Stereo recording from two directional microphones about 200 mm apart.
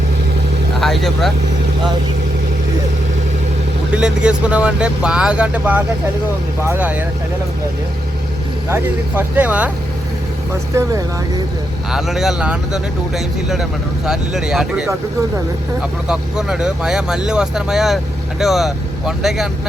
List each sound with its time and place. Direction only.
0.8 s speech: centre (ahead or behind)
3.9 s speech: 5° right (ahead or behind)
8.7 s speech: 10° right (ahead or behind)
10.8 s speech: 15° right (ahead or behind)
11.9 s speech: centre (ahead or behind)
16.0 s speech: 5° right (ahead or behind)